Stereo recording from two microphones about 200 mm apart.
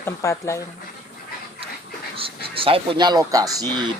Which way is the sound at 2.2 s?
25° right (ahead or behind).